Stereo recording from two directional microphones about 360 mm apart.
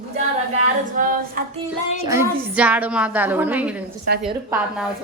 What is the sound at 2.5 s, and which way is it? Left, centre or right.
A woman's voice, centre.